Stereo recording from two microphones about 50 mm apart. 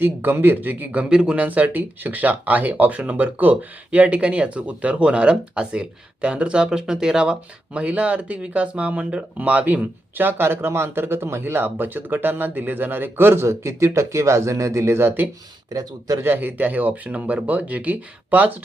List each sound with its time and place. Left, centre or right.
0.0 s speech: right
1.1 s speech: right
1.5 s speech: right
11.6 s speech: right
16.2 s speech: right